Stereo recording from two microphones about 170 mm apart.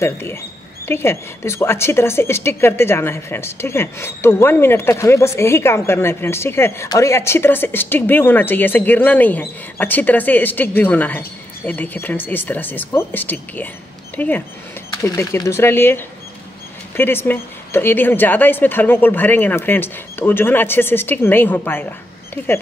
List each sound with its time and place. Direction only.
0.0 s speech: 15° left (ahead or behind)